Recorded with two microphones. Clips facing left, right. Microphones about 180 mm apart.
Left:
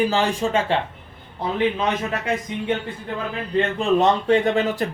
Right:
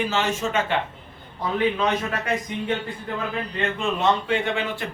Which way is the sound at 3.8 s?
35° left (ahead or behind).